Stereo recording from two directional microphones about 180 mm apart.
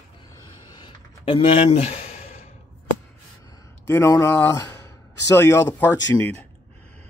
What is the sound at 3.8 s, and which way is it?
Speech, 15° left (ahead or behind).